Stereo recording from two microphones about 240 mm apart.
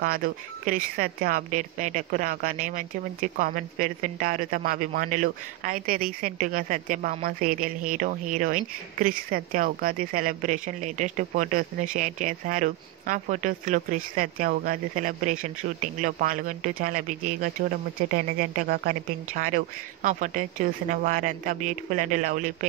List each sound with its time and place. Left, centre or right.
0.0 s speech: right